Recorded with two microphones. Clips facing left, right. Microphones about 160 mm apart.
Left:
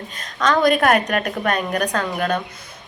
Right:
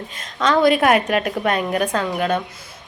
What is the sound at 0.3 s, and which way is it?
A woman's voice, 25° right (ahead or behind).